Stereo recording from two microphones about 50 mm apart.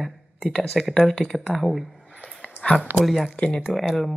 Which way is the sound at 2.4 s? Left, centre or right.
Left.